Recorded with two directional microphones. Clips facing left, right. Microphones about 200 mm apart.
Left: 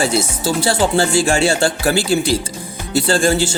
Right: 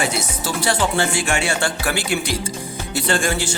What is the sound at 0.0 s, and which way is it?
A man's voice, 30° left (ahead or behind).